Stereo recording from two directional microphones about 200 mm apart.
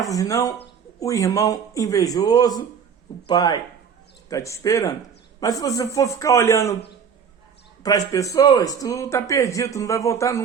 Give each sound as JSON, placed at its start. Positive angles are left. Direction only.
{"t": 0.1, "sound": "a man's voice", "side_deg": 15}
{"t": 7.8, "sound": "a man's voice", "side_deg": 15}